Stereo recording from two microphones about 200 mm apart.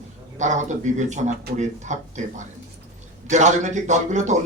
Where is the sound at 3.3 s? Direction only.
35° right (ahead or behind).